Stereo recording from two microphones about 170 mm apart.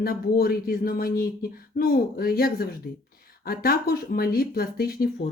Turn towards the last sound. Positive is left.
turn(degrees=60)  # may be behind; listen again after turning